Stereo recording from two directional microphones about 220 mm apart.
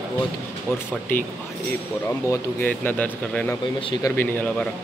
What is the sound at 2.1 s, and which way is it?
Speech, 10° left (ahead or behind).